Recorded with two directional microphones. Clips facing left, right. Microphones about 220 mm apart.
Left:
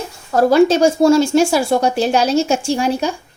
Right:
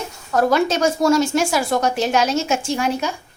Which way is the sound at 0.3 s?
30° left (ahead or behind).